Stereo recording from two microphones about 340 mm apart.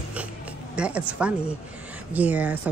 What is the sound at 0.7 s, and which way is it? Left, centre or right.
Speech, centre.